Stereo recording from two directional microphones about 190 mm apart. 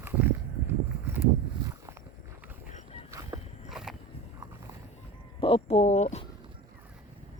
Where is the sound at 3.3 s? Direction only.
20° right (ahead or behind).